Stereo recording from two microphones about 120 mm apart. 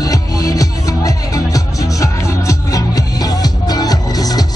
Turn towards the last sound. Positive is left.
turn(degrees=30)  # may be behind; listen again after turning